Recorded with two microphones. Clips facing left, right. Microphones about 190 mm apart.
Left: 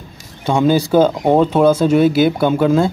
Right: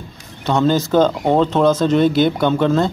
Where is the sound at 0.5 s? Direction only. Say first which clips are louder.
Left 2 dB; 10° left (ahead or behind).